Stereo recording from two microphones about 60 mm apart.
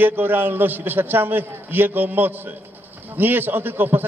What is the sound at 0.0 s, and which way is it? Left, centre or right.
A man's voice, right.